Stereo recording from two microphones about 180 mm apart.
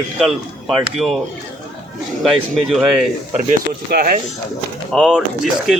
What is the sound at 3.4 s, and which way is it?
Speech, 50° right (ahead or behind).